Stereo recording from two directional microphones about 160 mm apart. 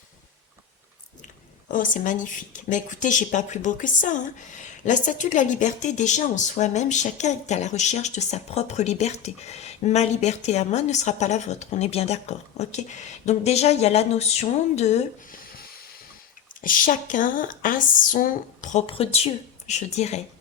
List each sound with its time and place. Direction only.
1.6 s speech: 55° left (ahead or behind)
15.3 s a sound: 65° left (ahead or behind)
16.6 s speech: 60° left (ahead or behind)
18.9 s speech: 35° left (ahead or behind)